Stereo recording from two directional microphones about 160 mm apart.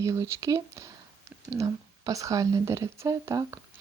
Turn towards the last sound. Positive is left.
turn(degrees=-20)  # may be behind; listen again after turning